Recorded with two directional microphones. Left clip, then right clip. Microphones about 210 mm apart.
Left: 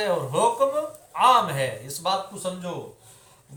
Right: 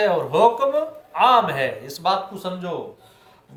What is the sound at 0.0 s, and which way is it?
Speech, 45° right (ahead or behind).